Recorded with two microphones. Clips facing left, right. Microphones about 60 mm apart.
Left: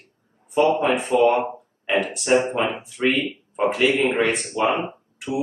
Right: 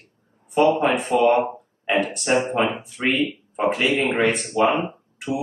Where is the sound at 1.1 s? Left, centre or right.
Right.